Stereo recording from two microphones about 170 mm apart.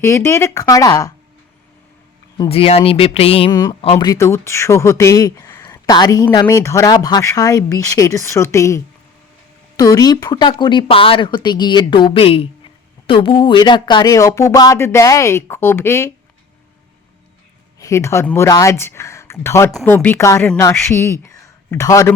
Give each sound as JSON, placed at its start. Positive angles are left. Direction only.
{"t": 0.0, "sound": "speech", "side_deg": 15}
{"t": 2.5, "sound": "speech", "side_deg": 35}
{"t": 3.5, "sound": "speech", "side_deg": 20}
{"t": 17.7, "sound": "speech", "side_deg": 15}